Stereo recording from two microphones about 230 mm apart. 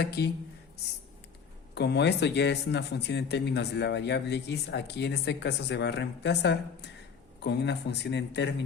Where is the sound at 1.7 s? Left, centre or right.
Left.